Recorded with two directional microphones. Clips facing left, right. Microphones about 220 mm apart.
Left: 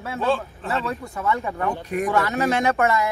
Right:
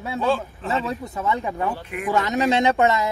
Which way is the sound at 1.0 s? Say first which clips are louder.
Even; 20° right (ahead or behind).